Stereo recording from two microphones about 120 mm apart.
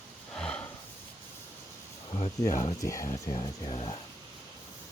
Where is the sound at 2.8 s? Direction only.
30° left (ahead or behind).